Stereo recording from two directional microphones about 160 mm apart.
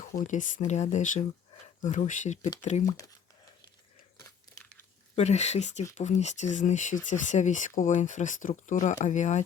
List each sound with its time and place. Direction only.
0.0 s speech: 55° left (ahead or behind)
5.1 s speech: 45° left (ahead or behind)